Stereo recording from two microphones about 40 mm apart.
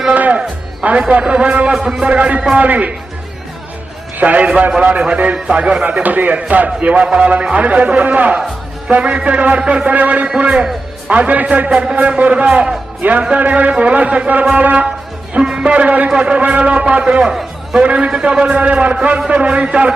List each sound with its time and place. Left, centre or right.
0.1 s a man's voice: right
4.2 s a man's voice: right